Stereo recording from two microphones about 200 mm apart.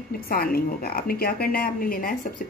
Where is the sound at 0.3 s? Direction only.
50° left (ahead or behind).